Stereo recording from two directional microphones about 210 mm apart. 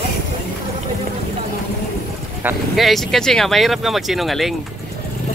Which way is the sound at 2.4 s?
5° right (ahead or behind).